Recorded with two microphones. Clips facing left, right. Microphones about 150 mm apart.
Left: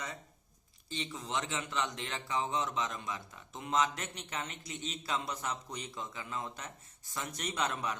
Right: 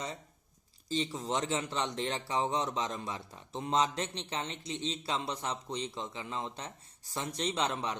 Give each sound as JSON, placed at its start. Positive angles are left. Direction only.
{"t": 0.9, "sound": "speech", "side_deg": -35}